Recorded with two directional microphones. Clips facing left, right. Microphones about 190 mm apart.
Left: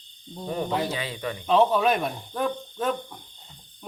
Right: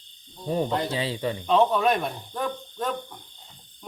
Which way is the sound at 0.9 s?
30° right (ahead or behind).